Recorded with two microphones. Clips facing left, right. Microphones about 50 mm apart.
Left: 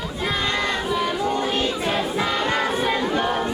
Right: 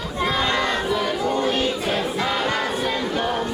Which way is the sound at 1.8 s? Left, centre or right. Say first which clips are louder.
Even; centre.